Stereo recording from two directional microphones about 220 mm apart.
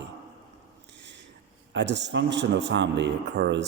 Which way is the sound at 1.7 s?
55° right (ahead or behind).